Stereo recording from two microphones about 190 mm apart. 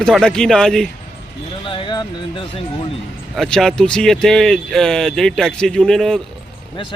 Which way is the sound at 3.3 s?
Centre (ahead or behind).